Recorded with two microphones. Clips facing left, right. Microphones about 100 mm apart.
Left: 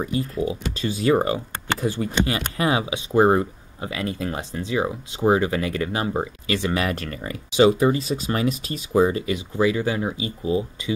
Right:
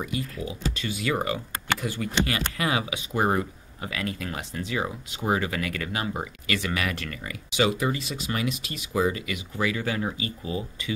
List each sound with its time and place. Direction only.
0.0 s speech: 30° left (ahead or behind)